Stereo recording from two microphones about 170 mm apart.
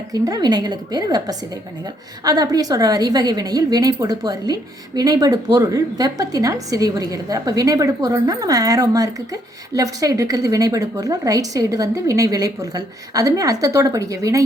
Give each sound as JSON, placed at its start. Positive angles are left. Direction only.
{"t": 0.1, "sound": "a woman's voice", "side_deg": -20}